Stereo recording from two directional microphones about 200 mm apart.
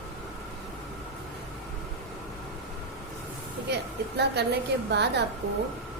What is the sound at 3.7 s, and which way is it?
A woman's voice, 55° right (ahead or behind).